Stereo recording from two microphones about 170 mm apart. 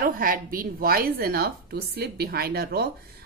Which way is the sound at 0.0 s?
55° right (ahead or behind).